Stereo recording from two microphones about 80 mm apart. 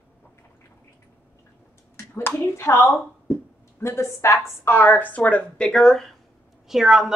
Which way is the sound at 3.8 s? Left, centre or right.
Left.